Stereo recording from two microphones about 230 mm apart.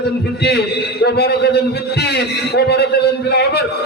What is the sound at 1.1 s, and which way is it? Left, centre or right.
A man's voice, left.